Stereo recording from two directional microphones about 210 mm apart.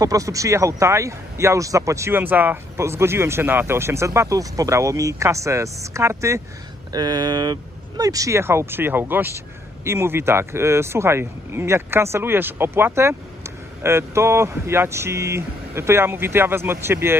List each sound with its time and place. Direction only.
0.0 s speech: 15° right (ahead or behind)